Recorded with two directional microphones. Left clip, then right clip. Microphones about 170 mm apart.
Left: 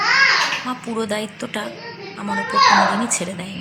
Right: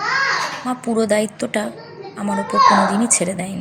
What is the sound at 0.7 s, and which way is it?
A woman's voice, 15° right (ahead or behind).